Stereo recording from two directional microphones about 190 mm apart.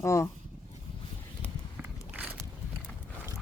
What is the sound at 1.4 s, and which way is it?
Walk, 10° right (ahead or behind).